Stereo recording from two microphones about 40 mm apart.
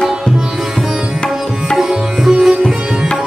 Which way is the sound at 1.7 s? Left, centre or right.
Centre.